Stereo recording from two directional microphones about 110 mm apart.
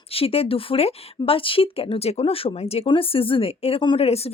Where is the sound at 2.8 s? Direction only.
55° left (ahead or behind).